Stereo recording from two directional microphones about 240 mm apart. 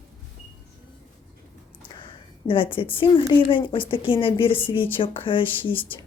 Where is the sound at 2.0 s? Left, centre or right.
Left.